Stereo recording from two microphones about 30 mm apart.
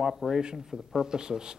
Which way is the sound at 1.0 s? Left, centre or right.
Right.